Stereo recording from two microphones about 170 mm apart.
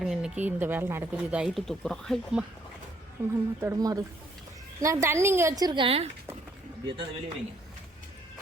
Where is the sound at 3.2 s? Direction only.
15° right (ahead or behind); by 6.1 s 35° right (ahead or behind).